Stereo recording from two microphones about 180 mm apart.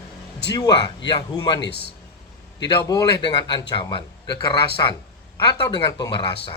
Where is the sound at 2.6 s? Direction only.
20° left (ahead or behind).